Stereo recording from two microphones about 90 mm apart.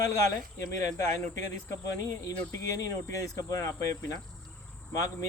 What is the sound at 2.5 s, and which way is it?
Speech, 35° left (ahead or behind).